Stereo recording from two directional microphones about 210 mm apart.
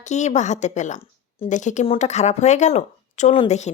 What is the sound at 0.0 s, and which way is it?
A woman's voice, 35° left (ahead or behind).